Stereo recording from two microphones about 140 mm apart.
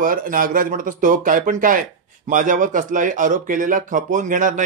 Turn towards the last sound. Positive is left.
turn(degrees=-70)  # may be behind; listen again after turning